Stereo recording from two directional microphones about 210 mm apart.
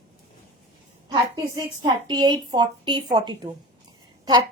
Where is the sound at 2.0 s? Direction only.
20° right (ahead or behind).